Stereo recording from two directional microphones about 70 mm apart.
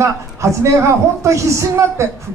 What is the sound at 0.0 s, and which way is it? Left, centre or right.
A man's voice, right.